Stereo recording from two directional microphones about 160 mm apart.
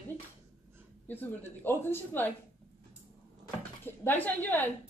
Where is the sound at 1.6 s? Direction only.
15° left (ahead or behind).